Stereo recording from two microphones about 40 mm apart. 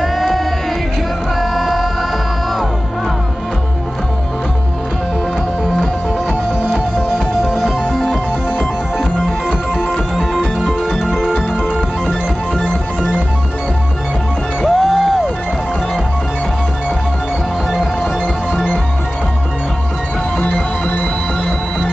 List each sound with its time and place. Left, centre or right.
0.0 s music: centre
1.4 s music: centre
7.5 s music: centre
9.8 s music: centre
10.6 s music: centre
14.6 s music: centre